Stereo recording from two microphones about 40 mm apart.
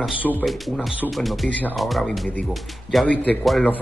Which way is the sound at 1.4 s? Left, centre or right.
Left.